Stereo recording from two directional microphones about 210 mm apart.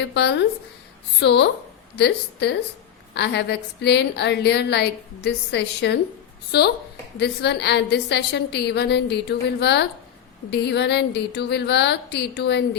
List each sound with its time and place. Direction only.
0.0 s a woman's voice: 55° left (ahead or behind)